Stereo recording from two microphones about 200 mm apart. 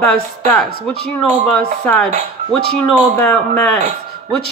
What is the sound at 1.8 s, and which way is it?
Speech, centre (ahead or behind).